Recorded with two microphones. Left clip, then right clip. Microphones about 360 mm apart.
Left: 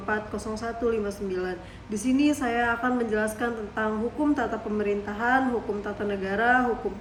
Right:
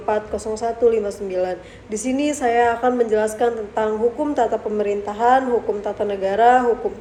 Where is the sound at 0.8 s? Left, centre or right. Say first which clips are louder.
Right 10 dB; right.